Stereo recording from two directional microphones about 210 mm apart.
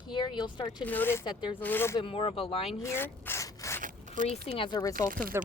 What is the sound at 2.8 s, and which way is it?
Rub, 10° left (ahead or behind).